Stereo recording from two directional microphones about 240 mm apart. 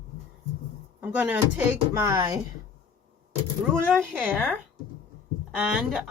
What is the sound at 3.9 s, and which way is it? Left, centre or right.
Speech, centre.